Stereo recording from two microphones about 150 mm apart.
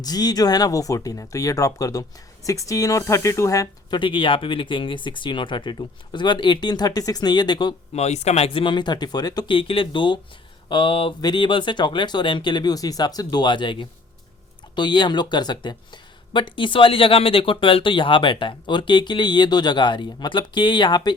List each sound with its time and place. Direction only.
0.0 s speech: 25° left (ahead or behind)
7.9 s speech: 45° left (ahead or behind); by 21.1 s 30° left (ahead or behind)